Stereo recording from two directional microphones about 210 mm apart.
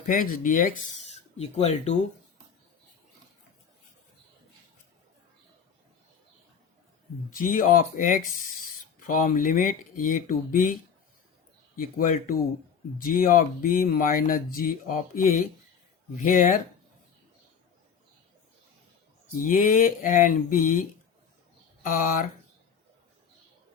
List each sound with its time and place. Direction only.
0.1 s speech: 40° left (ahead or behind)
7.3 s speech: 40° left (ahead or behind)
11.8 s speech: 40° left (ahead or behind)
19.4 s speech: 40° left (ahead or behind)
21.8 s speech: 40° left (ahead or behind)